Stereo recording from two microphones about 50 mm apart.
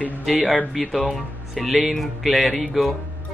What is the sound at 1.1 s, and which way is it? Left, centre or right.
Speech, centre.